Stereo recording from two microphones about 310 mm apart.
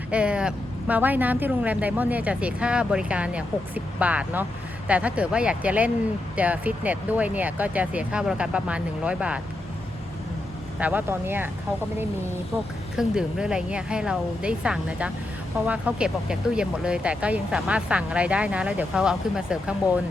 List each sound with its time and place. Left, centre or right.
0.1 s speech: centre
10.8 s speech: centre
13.0 s speech: centre